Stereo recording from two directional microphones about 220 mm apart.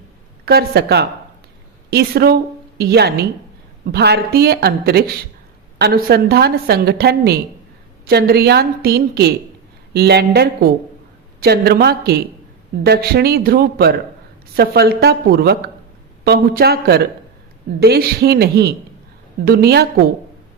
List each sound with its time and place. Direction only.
0.4 s a woman's voice: 45° right (ahead or behind)